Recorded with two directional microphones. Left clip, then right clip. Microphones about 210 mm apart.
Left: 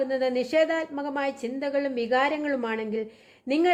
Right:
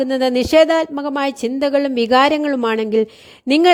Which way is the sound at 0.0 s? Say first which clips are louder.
Right 8 dB; 50° right (ahead or behind).